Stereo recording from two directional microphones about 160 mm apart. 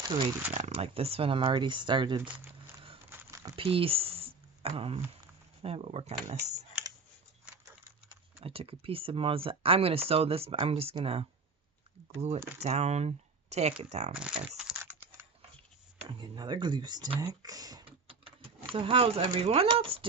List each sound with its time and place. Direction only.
0.0 s speech: 30° right (ahead or behind)
0.5 s speech: 40° right (ahead or behind)
2.5 s a sound: 35° right (ahead or behind)
3.1 s a sound: 20° right (ahead or behind)
3.5 s a sound: 35° right (ahead or behind)
5.6 s speech: 40° right (ahead or behind)
8.4 s speech: 35° right (ahead or behind)
12.5 s speech: 45° right (ahead or behind)
14.2 s crumpling: 5° right (ahead or behind)
16.0 s speech: 30° right (ahead or behind)
18.7 s speech: 35° right (ahead or behind)